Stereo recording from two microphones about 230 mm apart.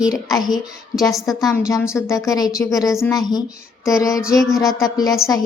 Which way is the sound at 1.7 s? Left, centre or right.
Centre.